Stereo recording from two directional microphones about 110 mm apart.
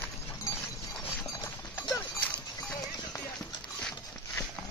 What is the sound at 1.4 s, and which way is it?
Clip-clop, 15° left (ahead or behind).